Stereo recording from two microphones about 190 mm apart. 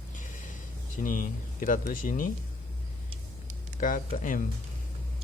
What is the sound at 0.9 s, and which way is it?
Speech, 45° left (ahead or behind).